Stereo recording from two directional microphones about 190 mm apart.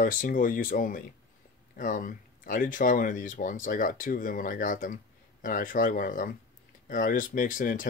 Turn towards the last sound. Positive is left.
turn(degrees=45)  # may be behind; listen again after turning